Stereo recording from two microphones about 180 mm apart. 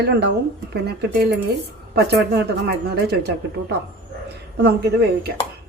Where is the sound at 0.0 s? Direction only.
65° right (ahead or behind).